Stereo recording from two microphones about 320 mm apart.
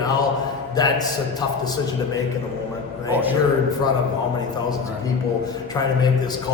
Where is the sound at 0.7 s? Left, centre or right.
Centre.